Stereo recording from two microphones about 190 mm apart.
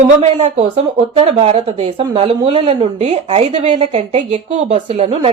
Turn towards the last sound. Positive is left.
turn(degrees=-30)  # may be behind; listen again after turning